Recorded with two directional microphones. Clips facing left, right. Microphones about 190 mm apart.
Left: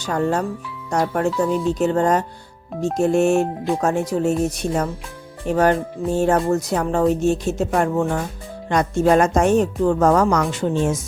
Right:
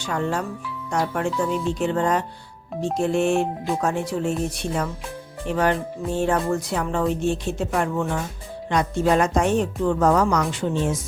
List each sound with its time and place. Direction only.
0.0 s speech: 40° left (ahead or behind)